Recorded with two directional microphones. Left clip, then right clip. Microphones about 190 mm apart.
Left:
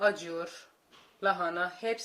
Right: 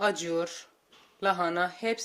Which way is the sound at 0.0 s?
50° right (ahead or behind).